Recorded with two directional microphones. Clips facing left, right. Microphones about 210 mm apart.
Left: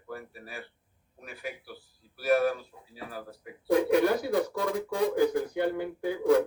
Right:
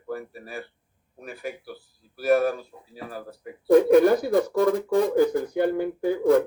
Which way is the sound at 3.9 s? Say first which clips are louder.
Right 7 dB; 50° right (ahead or behind).